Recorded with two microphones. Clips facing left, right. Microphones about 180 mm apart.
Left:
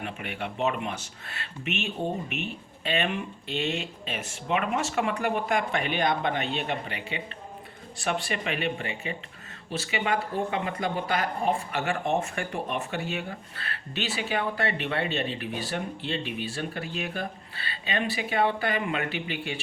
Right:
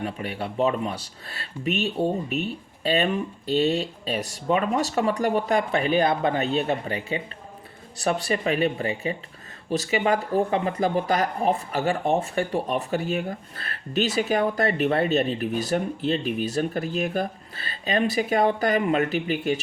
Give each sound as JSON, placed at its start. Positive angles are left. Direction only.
{"t": 0.0, "sound": "speech", "side_deg": -35}